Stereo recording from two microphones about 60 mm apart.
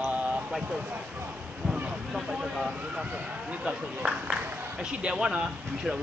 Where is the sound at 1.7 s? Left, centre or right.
Centre.